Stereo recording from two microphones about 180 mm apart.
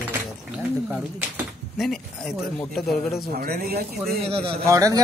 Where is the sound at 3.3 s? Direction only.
55° right (ahead or behind).